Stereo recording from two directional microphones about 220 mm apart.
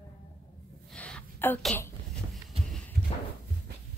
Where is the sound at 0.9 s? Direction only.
5° left (ahead or behind).